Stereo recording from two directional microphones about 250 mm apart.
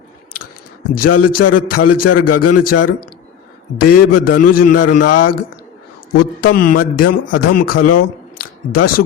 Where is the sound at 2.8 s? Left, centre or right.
Left.